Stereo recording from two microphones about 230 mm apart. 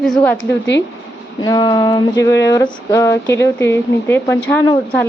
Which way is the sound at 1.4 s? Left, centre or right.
Centre.